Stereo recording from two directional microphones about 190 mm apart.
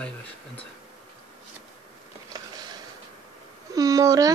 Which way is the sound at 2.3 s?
20° right (ahead or behind).